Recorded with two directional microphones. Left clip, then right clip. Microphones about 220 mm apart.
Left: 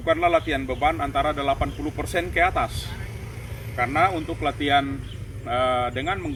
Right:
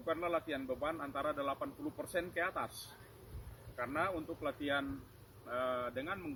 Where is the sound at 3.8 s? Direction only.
20° right (ahead or behind).